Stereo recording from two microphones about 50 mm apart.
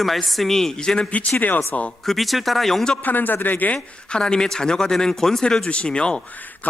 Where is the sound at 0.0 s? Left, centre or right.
Centre.